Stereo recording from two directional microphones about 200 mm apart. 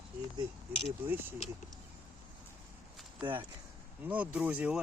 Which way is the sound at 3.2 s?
25° right (ahead or behind).